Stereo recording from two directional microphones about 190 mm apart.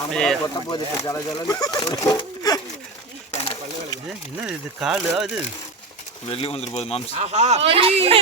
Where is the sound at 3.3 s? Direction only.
30° left (ahead or behind).